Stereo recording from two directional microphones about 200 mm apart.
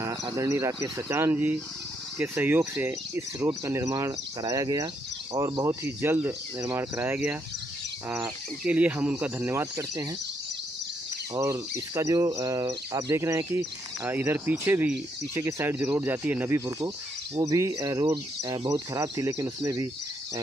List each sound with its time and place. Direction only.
0.0 s speech: 20° right (ahead or behind)
11.3 s speech: 15° right (ahead or behind)